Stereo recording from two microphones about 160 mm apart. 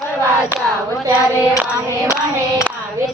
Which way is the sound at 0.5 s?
15° right (ahead or behind).